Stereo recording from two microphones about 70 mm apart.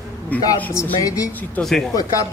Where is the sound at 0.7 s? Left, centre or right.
Left.